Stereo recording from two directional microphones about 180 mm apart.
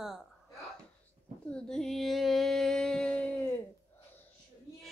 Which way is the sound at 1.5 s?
5° left (ahead or behind).